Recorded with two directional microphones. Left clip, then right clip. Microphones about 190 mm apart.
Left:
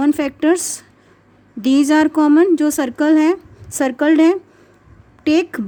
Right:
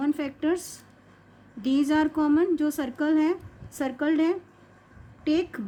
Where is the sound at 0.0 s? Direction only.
55° left (ahead or behind).